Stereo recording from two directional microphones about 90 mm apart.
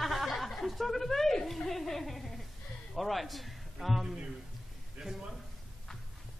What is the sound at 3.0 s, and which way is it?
A man's voice, centre (ahead or behind).